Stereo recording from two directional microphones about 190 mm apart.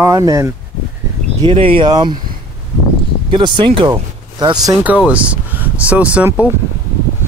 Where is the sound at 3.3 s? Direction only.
25° right (ahead or behind).